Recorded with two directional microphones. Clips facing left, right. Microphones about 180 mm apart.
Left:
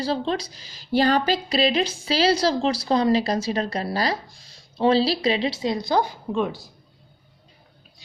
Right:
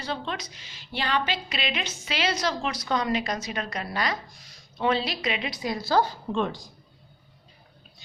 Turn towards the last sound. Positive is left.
turn(degrees=10)  # may be behind; listen again after turning